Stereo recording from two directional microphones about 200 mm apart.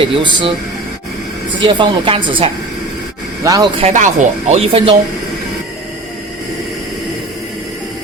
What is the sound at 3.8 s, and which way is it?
Speech, 35° right (ahead or behind).